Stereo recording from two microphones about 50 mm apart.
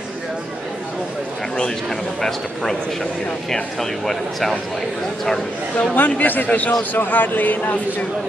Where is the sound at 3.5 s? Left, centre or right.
Centre.